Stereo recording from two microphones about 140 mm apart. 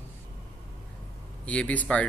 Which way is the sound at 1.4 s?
10° left (ahead or behind).